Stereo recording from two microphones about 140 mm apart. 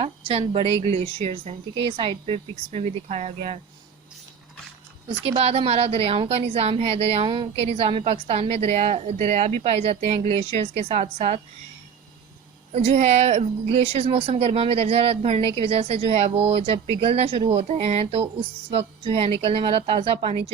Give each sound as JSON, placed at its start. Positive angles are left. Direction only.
{"t": 0.0, "sound": "speech", "side_deg": -45}
{"t": 5.2, "sound": "speech", "side_deg": -45}
{"t": 12.7, "sound": "speech", "side_deg": -50}